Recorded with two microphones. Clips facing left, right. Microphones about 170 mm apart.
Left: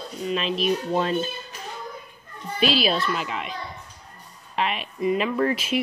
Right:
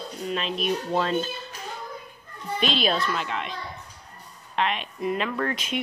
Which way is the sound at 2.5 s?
5° left (ahead or behind).